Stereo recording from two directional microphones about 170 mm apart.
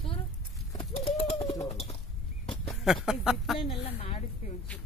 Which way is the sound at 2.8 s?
Centre (ahead or behind).